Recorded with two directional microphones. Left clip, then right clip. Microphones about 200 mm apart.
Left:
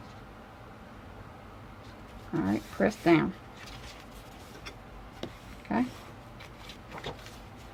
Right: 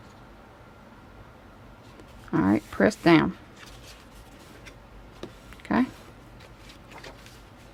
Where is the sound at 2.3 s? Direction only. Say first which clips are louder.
Right 7 dB; 50° right (ahead or behind).